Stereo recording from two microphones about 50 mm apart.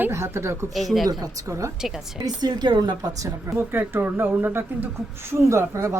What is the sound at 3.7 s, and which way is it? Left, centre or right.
Speech, right.